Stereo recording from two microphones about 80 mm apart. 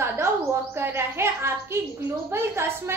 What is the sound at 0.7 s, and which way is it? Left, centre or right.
A child's voice, right.